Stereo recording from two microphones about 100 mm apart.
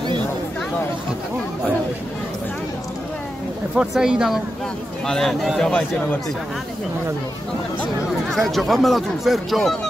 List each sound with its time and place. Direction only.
3.7 s speech: 5° right (ahead or behind)
5.0 s speech: 5° left (ahead or behind)
8.1 s speech: 5° left (ahead or behind)